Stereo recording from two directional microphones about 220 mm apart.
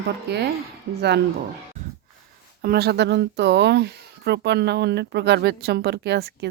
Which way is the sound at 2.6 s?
45° right (ahead or behind).